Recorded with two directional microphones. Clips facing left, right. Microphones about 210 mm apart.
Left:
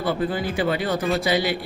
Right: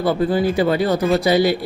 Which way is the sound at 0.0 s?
40° right (ahead or behind).